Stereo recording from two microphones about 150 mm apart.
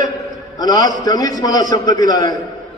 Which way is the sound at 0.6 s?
25° left (ahead or behind).